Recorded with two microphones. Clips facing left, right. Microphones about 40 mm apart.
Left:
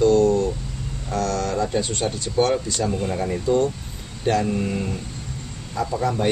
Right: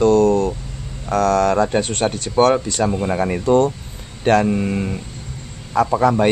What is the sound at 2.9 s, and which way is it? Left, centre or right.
Speech, right.